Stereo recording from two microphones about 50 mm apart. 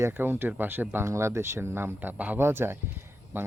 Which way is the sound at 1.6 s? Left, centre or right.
Right.